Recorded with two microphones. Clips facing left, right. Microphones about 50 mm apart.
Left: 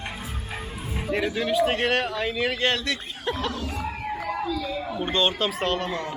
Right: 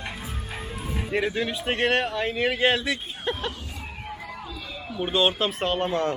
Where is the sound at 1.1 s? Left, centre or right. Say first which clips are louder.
Left 3 dB; centre.